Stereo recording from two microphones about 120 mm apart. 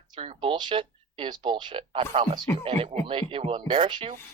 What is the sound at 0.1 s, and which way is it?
Speech, 50° right (ahead or behind).